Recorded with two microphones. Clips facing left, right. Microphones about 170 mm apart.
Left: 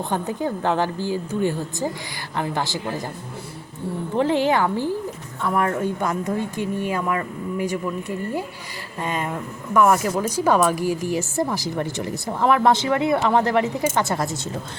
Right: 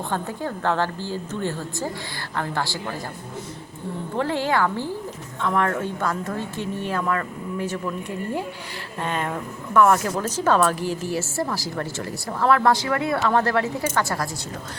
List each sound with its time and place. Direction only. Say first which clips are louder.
0.1 s speech: left 4 dB; 15° left (ahead or behind)
4.2 s speech: left 3 dB; 20° left (ahead or behind)
9.0 s speech: left 1 dB; 10° left (ahead or behind)